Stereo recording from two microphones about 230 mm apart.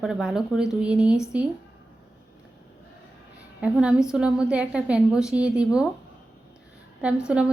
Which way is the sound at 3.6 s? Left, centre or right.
Centre.